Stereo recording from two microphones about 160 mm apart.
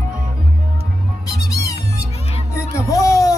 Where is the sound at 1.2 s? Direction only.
20° left (ahead or behind).